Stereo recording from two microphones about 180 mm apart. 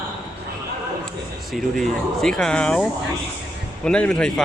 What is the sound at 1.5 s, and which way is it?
Speech, centre (ahead or behind).